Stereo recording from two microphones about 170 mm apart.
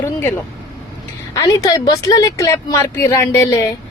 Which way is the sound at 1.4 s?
20° left (ahead or behind).